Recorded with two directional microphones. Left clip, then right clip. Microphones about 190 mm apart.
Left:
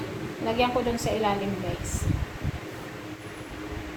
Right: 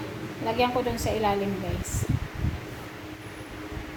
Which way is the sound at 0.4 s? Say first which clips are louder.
Even; 55° right (ahead or behind).